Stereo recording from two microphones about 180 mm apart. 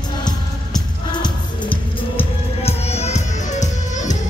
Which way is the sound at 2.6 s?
35° left (ahead or behind).